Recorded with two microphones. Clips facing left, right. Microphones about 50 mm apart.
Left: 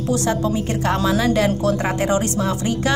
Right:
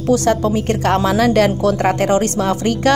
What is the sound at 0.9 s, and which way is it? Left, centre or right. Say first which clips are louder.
Speech: right 3 dB; right.